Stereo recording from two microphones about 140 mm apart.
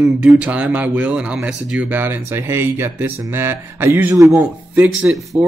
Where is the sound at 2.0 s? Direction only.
15° right (ahead or behind).